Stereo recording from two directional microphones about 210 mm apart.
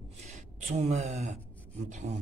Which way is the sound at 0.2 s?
30° right (ahead or behind).